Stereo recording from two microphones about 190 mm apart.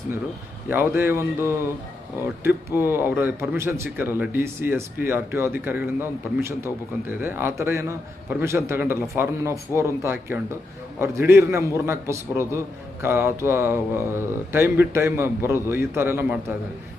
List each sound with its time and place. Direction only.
0.7 s speech: 10° right (ahead or behind)